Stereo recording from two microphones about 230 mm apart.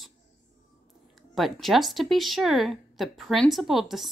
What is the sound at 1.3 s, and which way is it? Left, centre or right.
Speech, centre.